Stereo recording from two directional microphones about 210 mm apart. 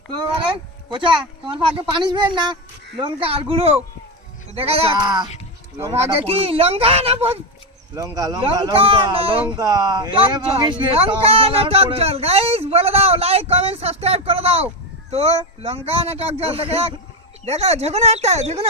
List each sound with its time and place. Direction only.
0.1 s speech: 25° right (ahead or behind)
7.9 s speech: 15° right (ahead or behind)